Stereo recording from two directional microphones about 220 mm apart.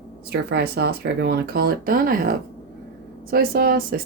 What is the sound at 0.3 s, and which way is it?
Speech, 50° right (ahead or behind).